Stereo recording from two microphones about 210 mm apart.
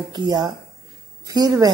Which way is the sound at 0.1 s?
20° right (ahead or behind).